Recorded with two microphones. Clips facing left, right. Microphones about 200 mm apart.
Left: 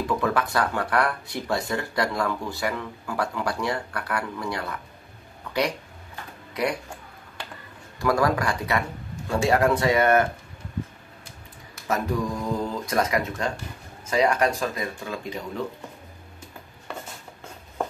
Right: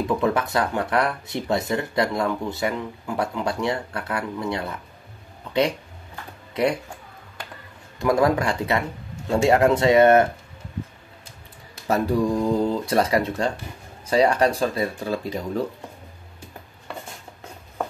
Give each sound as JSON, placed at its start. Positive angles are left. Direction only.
{"t": 0.0, "sound": "speech", "side_deg": -20}
{"t": 6.5, "sound": "speech", "side_deg": -25}
{"t": 8.0, "sound": "speech", "side_deg": -25}
{"t": 11.9, "sound": "speech", "side_deg": -30}